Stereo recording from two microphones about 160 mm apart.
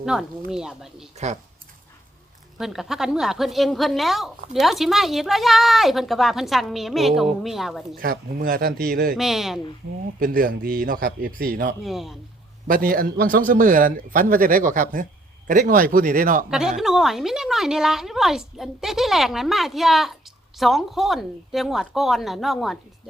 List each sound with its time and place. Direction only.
0.0 s a woman's voice: 5° right (ahead or behind)
1.1 s speech: 45° right (ahead or behind)
2.6 s a woman's voice: centre (ahead or behind)
8.0 s speech: 65° right (ahead or behind)
9.1 s a woman's voice: centre (ahead or behind)
10.2 s a man's voice: 60° right (ahead or behind)
11.8 s a woman's voice: centre (ahead or behind)
12.6 s a man's voice: 60° right (ahead or behind)
16.5 s a woman's voice: 5° right (ahead or behind)